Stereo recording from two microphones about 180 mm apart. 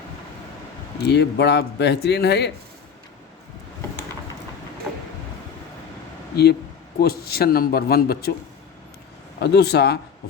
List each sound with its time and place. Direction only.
1.0 s a man's voice: 70° left (ahead or behind)
6.3 s speech: 65° left (ahead or behind)
9.4 s speech: 65° left (ahead or behind)